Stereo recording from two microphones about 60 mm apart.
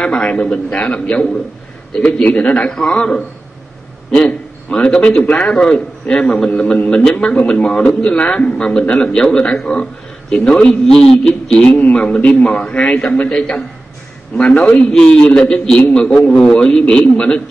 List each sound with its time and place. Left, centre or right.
0.0 s a man's voice: centre
11.6 s a man's voice: left
14.9 s a man's voice: centre